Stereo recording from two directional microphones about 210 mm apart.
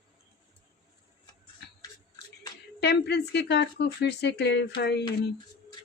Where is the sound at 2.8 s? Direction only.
50° left (ahead or behind).